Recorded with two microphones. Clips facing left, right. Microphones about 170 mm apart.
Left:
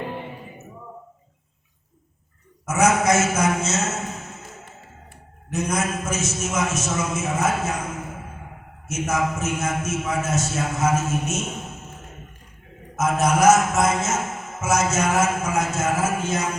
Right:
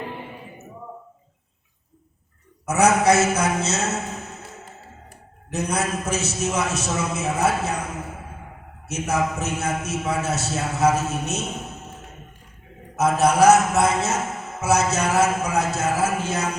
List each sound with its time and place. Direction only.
2.6 s a man's voice: 35° right (ahead or behind)
8.9 s a man's voice: 35° right (ahead or behind)
13.0 s a man's voice: 35° right (ahead or behind)